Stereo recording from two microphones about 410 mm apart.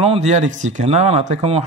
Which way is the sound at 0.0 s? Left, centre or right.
Centre.